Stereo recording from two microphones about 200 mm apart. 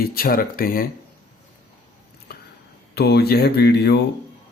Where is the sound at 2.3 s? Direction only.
50° left (ahead or behind).